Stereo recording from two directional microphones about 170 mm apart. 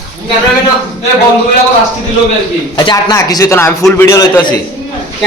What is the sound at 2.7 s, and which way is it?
Speech, 25° left (ahead or behind).